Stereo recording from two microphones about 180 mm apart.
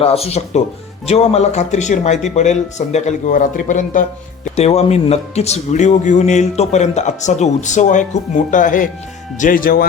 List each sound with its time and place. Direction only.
0.0 s speech: 35° left (ahead or behind)
4.5 s speech: 35° left (ahead or behind); by 9.8 s 50° left (ahead or behind)